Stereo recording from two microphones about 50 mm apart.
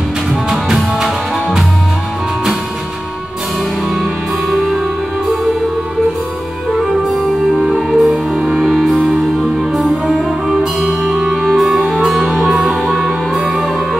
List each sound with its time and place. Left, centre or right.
0.5 s music: centre
4.0 s music: centre
7.1 s music: centre
8.5 s music: centre
10.0 s music: centre
10.8 s music: right
11.2 s music: centre